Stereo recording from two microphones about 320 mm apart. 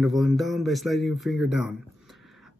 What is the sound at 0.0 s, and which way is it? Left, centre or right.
Speech, centre.